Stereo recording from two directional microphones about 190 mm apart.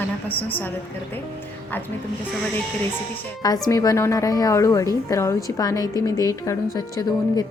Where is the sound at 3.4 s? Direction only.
20° left (ahead or behind).